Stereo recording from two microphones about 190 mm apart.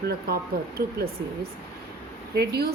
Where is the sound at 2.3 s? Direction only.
55° right (ahead or behind).